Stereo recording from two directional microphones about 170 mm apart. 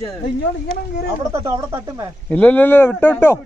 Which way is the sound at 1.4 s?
15° right (ahead or behind).